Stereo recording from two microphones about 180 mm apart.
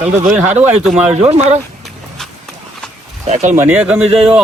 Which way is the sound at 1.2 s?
35° right (ahead or behind).